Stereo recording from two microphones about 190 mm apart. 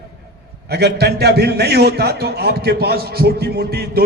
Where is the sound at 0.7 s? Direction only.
55° right (ahead or behind).